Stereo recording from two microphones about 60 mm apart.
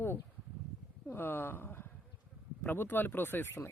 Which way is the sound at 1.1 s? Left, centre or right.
Left.